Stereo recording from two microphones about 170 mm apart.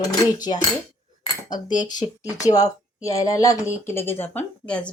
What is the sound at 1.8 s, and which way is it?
Speech, 25° left (ahead or behind).